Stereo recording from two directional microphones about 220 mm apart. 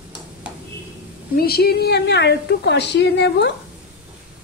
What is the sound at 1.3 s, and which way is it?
A woman's voice, 45° left (ahead or behind).